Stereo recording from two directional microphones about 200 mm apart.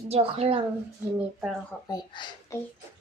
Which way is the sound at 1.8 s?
20° left (ahead or behind).